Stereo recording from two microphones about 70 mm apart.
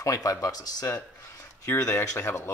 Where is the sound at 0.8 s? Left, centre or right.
Left.